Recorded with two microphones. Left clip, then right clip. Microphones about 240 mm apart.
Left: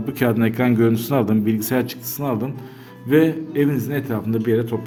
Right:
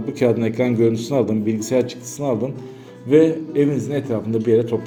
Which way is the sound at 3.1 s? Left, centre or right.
Centre.